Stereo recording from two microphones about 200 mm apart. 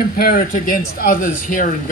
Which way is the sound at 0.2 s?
45° left (ahead or behind).